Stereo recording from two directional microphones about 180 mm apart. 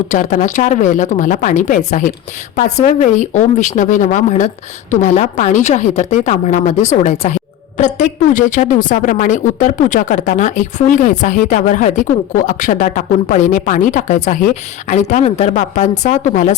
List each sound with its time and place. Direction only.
0.1 s a woman's voice: 45° left (ahead or behind)